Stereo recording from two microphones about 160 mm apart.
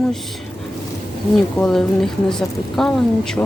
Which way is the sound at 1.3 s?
5° left (ahead or behind).